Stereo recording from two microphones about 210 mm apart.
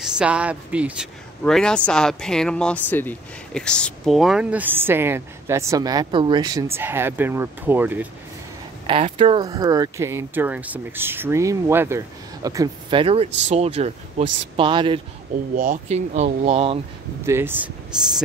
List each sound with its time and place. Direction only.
0.0 s speech: 5° right (ahead or behind)
8.8 s speech: 25° right (ahead or behind)
15.5 s speech: 40° right (ahead or behind)
17.3 s speech: 10° right (ahead or behind)